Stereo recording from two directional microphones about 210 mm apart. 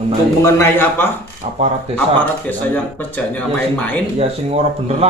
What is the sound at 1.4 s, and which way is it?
Speech, 30° right (ahead or behind).